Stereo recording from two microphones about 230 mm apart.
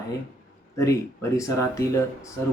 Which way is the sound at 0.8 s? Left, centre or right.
Centre.